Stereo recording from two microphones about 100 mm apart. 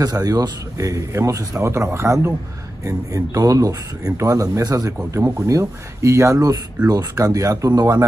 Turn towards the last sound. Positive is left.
turn(degrees=-40)  # may be behind; listen again after turning